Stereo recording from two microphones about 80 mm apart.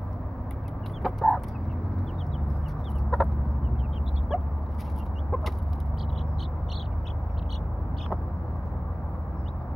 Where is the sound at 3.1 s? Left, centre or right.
Centre.